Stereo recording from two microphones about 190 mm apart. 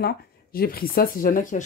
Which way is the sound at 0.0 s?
50° left (ahead or behind).